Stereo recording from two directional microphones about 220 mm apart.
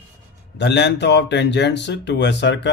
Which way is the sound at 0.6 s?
50° left (ahead or behind).